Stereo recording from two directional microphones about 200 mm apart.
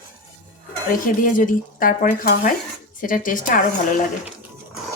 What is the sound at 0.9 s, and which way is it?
Speech, 45° left (ahead or behind).